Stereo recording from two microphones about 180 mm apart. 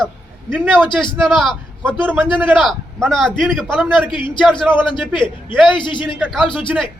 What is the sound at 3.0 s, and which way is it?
A man's voice, 5° left (ahead or behind).